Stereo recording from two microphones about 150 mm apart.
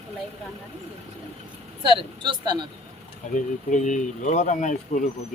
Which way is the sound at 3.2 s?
50° left (ahead or behind).